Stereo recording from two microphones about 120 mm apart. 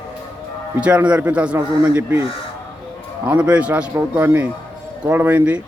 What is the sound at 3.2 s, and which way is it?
A man's voice, 10° right (ahead or behind).